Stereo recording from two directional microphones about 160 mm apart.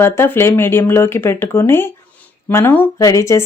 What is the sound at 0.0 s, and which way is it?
Speech, 15° left (ahead or behind).